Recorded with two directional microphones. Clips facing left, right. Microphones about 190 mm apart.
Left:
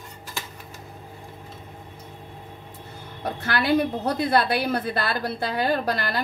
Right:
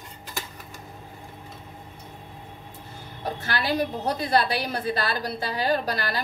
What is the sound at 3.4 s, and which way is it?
A woman's voice, 55° left (ahead or behind).